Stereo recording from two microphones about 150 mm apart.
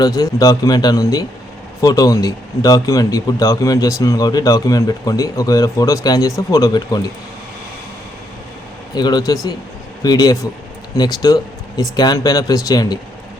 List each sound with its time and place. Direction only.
0.0 s speech: 25° left (ahead or behind)
9.0 s speech: 30° left (ahead or behind)